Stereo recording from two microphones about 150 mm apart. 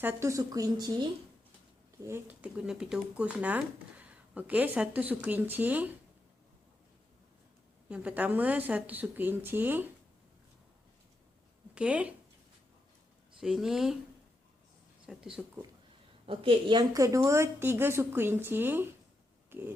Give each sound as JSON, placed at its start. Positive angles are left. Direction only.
{"t": 0.0, "sound": "speech", "side_deg": -15}
{"t": 2.0, "sound": "speech", "side_deg": -15}
{"t": 7.9, "sound": "speech", "side_deg": -10}
{"t": 11.7, "sound": "speech", "side_deg": -10}
{"t": 13.4, "sound": "speech", "side_deg": -5}
{"t": 15.0, "sound": "speech", "side_deg": -5}
{"t": 16.2, "sound": "a woman's voice", "side_deg": -35}
{"t": 17.0, "sound": "speech", "side_deg": -20}
{"t": 19.5, "sound": "a sound", "side_deg": -15}